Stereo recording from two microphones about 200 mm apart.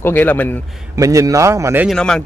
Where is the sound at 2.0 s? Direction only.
5° left (ahead or behind).